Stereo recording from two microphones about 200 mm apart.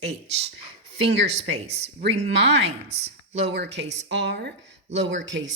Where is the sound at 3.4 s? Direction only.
60° right (ahead or behind).